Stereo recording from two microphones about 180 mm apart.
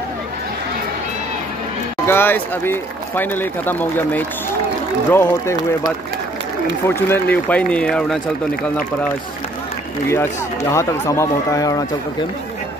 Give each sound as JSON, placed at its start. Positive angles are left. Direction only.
{"t": 2.0, "sound": "speech", "side_deg": 10}
{"t": 7.1, "sound": "speech", "side_deg": 10}
{"t": 10.0, "sound": "speech", "side_deg": 15}